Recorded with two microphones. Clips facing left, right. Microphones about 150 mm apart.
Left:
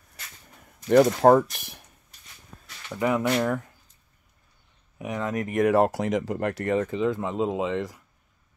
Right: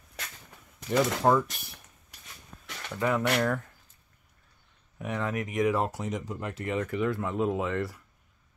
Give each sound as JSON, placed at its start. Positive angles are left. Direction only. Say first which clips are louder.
{"t": 0.8, "sound": "speech", "louder": "left 8 dB", "side_deg": 55}
{"t": 3.0, "sound": "speech", "louder": "left 3 dB", "side_deg": 15}
{"t": 4.9, "sound": "speech", "louder": "left 2 dB", "side_deg": 15}
{"t": 5.3, "sound": "speech", "louder": "left 4 dB", "side_deg": 45}
{"t": 5.6, "sound": "speech", "louder": "left 7 dB", "side_deg": 70}
{"t": 6.9, "sound": "speech", "louder": "left 3 dB", "side_deg": 20}